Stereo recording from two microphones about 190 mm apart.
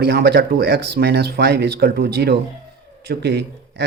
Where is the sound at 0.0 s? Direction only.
60° right (ahead or behind).